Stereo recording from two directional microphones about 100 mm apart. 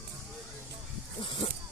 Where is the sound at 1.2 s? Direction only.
60° left (ahead or behind).